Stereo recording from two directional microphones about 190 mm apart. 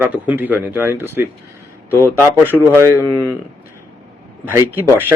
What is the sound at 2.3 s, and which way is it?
Speech, 10° right (ahead or behind).